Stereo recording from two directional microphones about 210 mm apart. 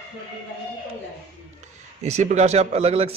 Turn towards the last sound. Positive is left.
turn(degrees=-30)  # may be behind; listen again after turning